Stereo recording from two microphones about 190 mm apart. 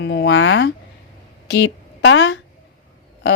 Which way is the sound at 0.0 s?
65° left (ahead or behind).